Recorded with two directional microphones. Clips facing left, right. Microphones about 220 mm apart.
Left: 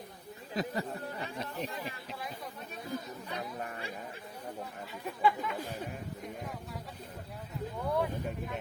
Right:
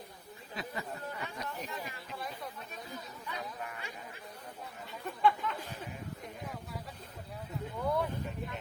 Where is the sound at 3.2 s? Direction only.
40° left (ahead or behind).